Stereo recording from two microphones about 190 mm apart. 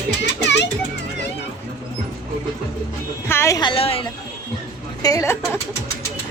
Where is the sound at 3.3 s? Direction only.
15° left (ahead or behind); by 4.1 s 30° left (ahead or behind).